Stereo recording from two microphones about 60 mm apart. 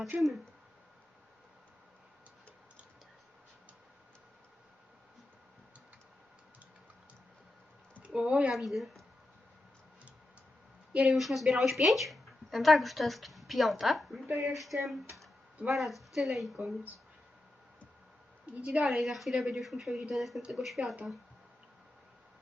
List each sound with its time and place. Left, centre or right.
0.1 s a woman's voice: right
8.0 s speech: centre
8.5 s a woman's voice: centre
10.9 s a woman's voice: centre
18.6 s a woman's voice: centre
18.9 s a woman's voice: centre